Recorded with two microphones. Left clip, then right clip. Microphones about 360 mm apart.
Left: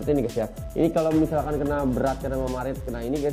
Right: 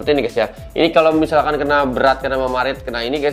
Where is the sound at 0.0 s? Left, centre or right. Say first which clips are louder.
Right 8 dB; centre.